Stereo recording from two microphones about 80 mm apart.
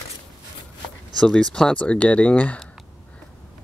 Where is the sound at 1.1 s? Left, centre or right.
Centre.